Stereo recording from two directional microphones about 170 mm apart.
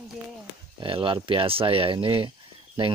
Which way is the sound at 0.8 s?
30° right (ahead or behind).